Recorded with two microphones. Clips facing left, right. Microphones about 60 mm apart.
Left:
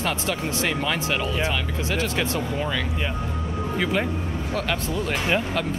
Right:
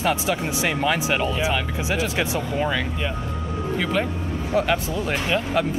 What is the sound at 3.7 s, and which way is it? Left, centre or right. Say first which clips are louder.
Music: right 1 dB; centre.